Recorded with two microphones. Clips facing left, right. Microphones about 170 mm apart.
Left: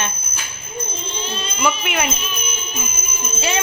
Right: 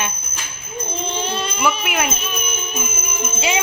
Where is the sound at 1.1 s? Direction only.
65° right (ahead or behind).